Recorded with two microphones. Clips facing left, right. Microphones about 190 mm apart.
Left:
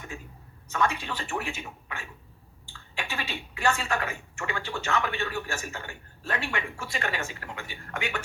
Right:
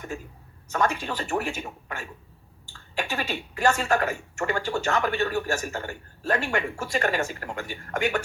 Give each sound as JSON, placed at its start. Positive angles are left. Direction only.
{"t": 0.7, "sound": "speech", "side_deg": -45}